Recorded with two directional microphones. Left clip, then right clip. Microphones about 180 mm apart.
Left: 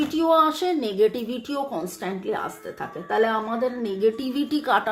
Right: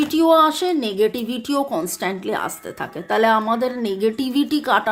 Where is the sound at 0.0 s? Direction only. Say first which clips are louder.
Right 5 dB; 40° right (ahead or behind).